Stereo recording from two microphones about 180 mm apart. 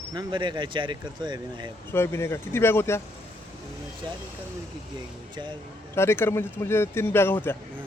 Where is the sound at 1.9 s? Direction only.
15° left (ahead or behind).